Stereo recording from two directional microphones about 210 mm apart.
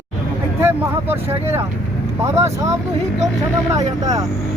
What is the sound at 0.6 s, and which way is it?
Speech, 10° right (ahead or behind).